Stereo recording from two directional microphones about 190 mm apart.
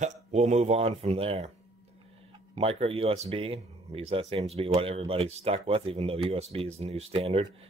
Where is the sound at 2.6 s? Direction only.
30° right (ahead or behind).